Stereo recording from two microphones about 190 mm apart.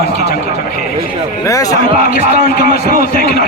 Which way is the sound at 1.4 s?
20° left (ahead or behind).